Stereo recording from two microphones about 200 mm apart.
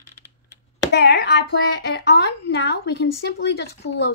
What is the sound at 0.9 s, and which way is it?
Speech, 55° left (ahead or behind).